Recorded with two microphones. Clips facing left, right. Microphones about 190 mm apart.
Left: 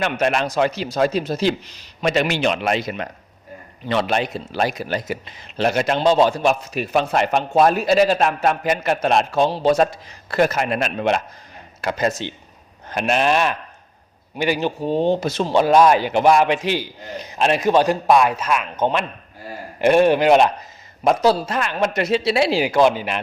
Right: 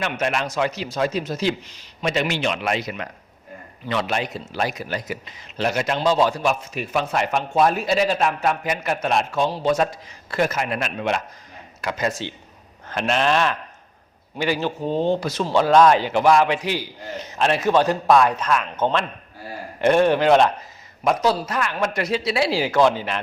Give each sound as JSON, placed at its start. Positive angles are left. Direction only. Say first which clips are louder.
{"t": 0.0, "sound": "a man's voice", "louder": "left 4 dB", "side_deg": 35}
{"t": 2.0, "sound": "a man's voice", "louder": "left 4 dB", "side_deg": 60}
{"t": 2.5, "sound": "a man's voice", "louder": "left 3 dB", "side_deg": 35}
{"t": 12.9, "sound": "a man's voice", "louder": "left 2 dB", "side_deg": 15}
{"t": 21.0, "sound": "a man's voice", "louder": "left 3 dB", "side_deg": 30}